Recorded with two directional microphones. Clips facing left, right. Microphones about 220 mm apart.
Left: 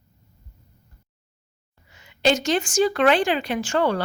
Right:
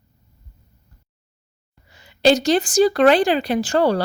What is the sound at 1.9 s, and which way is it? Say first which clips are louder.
A woman's voice: right 5 dB; 35° right (ahead or behind).